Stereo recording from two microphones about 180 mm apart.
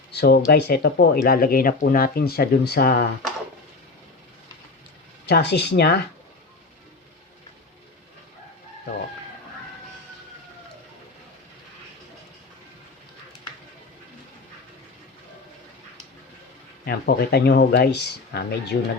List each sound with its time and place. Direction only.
0.1 s speech: 65° left (ahead or behind)
5.3 s speech: 70° left (ahead or behind)
16.8 s speech: 60° left (ahead or behind)